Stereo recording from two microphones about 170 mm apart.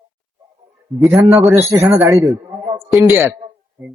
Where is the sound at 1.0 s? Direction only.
Centre (ahead or behind).